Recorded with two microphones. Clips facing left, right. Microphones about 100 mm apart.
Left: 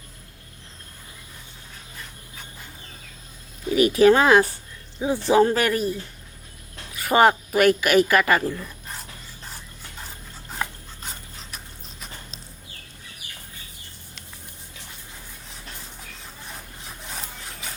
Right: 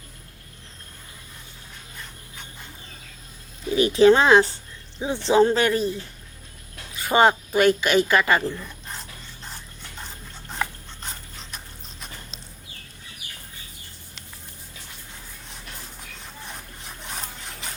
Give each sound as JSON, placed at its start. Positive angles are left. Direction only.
{"t": 3.8, "sound": "speech", "side_deg": -25}
{"t": 8.4, "sound": "speech", "side_deg": 5}
{"t": 10.5, "sound": "a sound", "side_deg": 5}
{"t": 16.2, "sound": "rub", "side_deg": 0}